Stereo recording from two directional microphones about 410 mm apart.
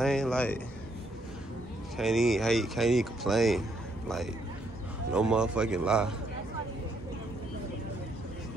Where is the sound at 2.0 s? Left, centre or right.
Centre.